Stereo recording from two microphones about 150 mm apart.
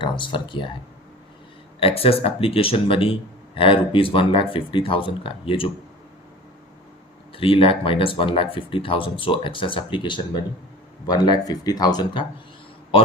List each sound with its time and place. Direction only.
0.0 s speech: 30° left (ahead or behind)
1.8 s a man's voice: 40° left (ahead or behind)
7.3 s a man's voice: 40° left (ahead or behind)